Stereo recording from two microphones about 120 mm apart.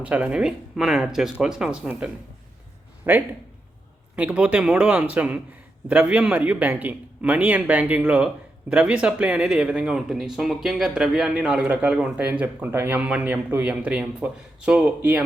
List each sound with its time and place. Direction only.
0.0 s speech: 10° right (ahead or behind)
3.1 s speech: 15° right (ahead or behind)